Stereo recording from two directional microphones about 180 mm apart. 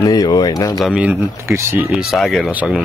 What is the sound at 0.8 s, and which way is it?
Speech, 5° right (ahead or behind).